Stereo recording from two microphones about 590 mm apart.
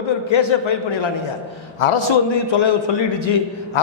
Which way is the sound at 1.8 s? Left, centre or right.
Left.